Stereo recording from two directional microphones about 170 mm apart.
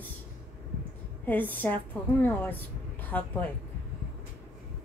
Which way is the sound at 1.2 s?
10° left (ahead or behind).